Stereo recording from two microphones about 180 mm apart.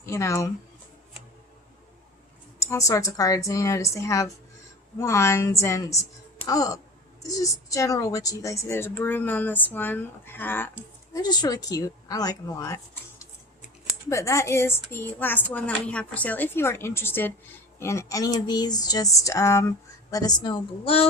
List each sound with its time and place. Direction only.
0.0 s speech: 15° left (ahead or behind)
2.6 s speech: 15° left (ahead or behind)